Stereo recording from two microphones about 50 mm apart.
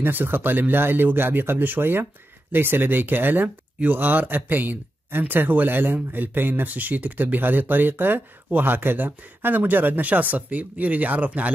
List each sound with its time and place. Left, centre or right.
0.0 s speech: right